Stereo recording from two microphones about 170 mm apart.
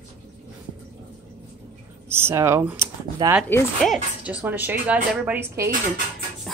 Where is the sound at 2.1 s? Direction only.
15° right (ahead or behind).